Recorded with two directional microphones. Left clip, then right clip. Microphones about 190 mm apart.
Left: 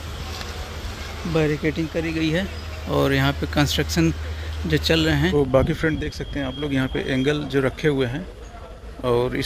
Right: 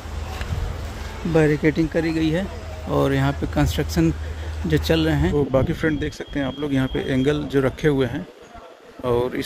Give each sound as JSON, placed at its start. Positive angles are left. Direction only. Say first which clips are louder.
{"t": 1.3, "sound": "speech", "louder": "right 4 dB", "side_deg": -25}
{"t": 2.1, "sound": "speech", "louder": "right 1 dB", "side_deg": -15}
{"t": 5.9, "sound": "speech", "louder": "right 2 dB", "side_deg": -30}
{"t": 9.0, "sound": "speech", "louder": "even", "side_deg": -10}